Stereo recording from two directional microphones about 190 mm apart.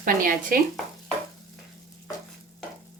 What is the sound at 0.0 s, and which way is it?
Speech, 45° right (ahead or behind).